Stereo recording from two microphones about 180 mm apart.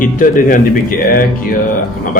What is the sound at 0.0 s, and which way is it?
Speech, 50° left (ahead or behind).